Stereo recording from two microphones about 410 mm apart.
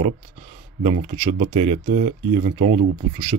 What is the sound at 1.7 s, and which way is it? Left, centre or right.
Speech, centre.